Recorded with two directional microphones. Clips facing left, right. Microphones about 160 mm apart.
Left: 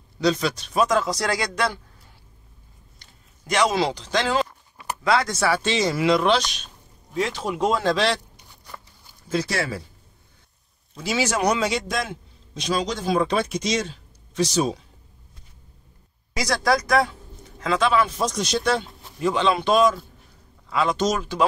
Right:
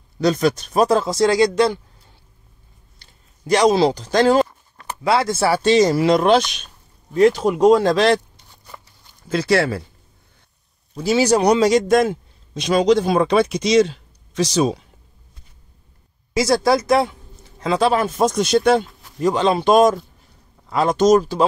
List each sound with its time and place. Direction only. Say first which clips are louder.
0.2 s speech: right 5 dB; 50° right (ahead or behind)
0.8 s speech: right 9 dB; 30° right (ahead or behind)
3.0 s speech: right 10 dB; 35° right (ahead or behind)
5.0 s speech: right 4 dB; 30° right (ahead or behind); by 8.2 s 50° right (ahead or behind)
9.3 s a man's voice: right 7 dB; 70° right (ahead or behind)
11.0 s a man's voice: right 8 dB; 35° right (ahead or behind); by 14.8 s 85° right
16.3 s speech: right 6 dB; 25° right (ahead or behind); by 18.9 s 55° right (ahead or behind)
19.2 s speech: right 4 dB; 40° right (ahead or behind)